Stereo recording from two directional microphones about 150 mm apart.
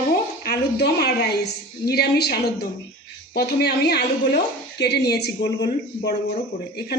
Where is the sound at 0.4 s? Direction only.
90° left.